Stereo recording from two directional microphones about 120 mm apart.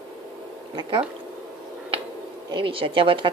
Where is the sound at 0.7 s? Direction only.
45° right (ahead or behind).